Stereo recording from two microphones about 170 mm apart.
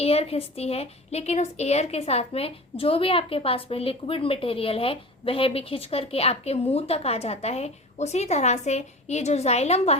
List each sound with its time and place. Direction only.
0.0 s a woman's voice: 35° left (ahead or behind)